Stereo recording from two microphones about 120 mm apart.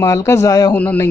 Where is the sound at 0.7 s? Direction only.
15° left (ahead or behind).